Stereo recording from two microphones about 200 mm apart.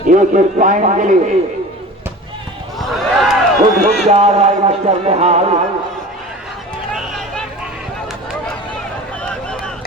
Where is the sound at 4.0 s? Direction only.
35° right (ahead or behind).